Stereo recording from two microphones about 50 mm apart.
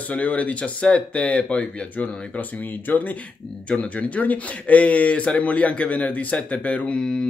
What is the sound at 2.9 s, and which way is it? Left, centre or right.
Speech, left.